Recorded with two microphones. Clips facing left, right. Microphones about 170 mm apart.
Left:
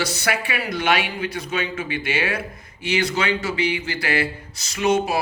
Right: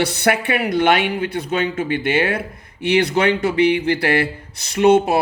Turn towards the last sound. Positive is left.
turn(degrees=-60)  # may be behind; listen again after turning